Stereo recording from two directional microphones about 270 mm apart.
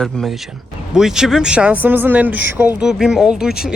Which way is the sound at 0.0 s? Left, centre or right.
Centre.